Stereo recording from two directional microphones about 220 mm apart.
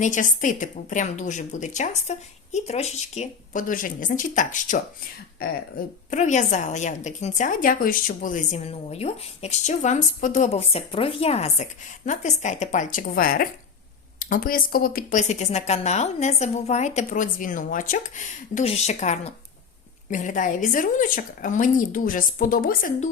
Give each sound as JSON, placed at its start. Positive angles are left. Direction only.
{"t": 0.0, "sound": "a woman's voice", "side_deg": 35}